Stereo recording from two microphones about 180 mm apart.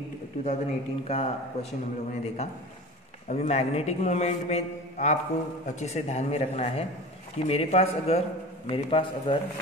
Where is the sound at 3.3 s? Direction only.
35° left (ahead or behind).